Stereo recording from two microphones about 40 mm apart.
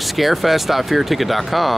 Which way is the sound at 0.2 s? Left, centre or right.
Centre.